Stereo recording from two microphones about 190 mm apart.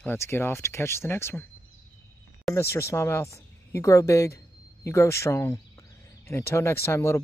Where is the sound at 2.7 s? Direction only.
15° left (ahead or behind).